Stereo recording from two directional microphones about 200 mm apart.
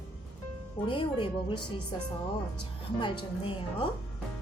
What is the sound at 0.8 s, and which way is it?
Speech, 25° left (ahead or behind).